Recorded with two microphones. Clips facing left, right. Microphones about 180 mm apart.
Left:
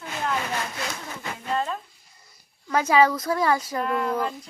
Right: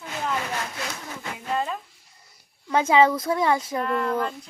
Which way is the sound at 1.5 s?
5° right (ahead or behind).